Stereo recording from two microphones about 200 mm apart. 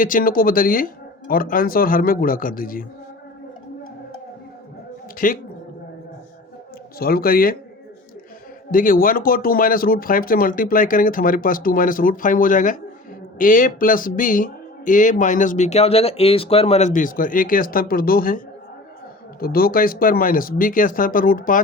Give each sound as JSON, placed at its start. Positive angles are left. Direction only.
{"t": 0.0, "sound": "speech", "side_deg": 45}
{"t": 5.1, "sound": "a woman's voice", "side_deg": 45}
{"t": 7.0, "sound": "speech", "side_deg": 50}
{"t": 8.7, "sound": "speech", "side_deg": 45}